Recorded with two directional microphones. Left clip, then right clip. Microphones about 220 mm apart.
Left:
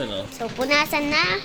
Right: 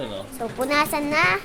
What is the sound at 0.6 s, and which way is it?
Speech, centre (ahead or behind).